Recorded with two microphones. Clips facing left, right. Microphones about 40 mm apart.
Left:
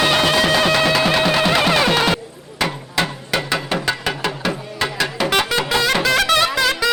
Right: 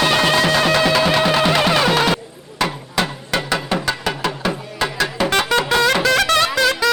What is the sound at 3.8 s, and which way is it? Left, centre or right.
Music, centre.